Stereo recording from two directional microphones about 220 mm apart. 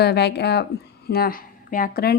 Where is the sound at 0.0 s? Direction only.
50° left (ahead or behind).